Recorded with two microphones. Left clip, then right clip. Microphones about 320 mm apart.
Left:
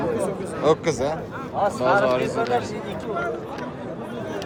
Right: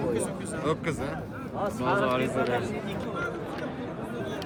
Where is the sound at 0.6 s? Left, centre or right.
Centre.